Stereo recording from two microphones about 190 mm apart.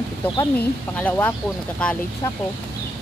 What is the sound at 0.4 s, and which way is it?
Speech, 10° left (ahead or behind).